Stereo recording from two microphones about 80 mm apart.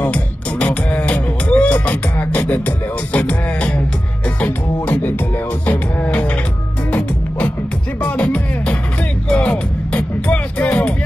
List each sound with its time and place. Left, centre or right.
0.0 s music: centre